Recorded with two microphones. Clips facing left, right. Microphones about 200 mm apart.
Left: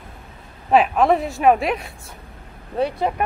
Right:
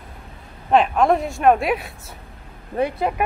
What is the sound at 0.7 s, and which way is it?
Speech, 5° left (ahead or behind).